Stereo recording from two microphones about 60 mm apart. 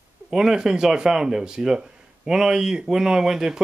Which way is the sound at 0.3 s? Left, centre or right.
Centre.